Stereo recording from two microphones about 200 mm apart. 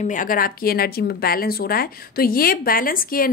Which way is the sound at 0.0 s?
40° left (ahead or behind).